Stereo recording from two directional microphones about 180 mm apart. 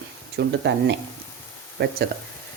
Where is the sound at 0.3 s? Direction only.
70° right (ahead or behind).